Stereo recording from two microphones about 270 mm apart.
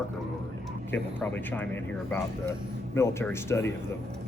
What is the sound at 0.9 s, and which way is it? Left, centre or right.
Speech, centre.